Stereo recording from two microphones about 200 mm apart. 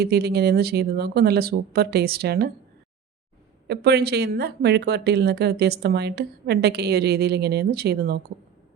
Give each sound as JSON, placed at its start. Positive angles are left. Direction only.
{"t": 0.0, "sound": "speech", "side_deg": -50}
{"t": 3.7, "sound": "speech", "side_deg": -55}